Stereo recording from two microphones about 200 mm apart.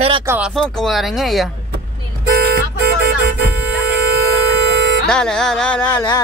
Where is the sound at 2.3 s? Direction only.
50° right (ahead or behind).